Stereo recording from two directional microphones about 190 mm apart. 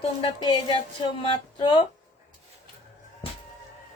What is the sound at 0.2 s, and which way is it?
Speech, 20° left (ahead or behind).